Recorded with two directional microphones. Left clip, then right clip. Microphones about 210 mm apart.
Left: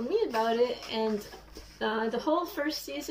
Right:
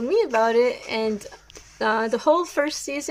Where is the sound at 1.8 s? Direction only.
20° right (ahead or behind).